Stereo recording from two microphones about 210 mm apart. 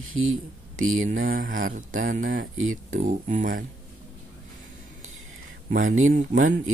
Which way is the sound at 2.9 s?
35° right (ahead or behind).